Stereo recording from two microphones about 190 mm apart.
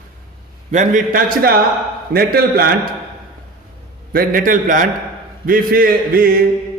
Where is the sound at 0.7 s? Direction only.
40° right (ahead or behind).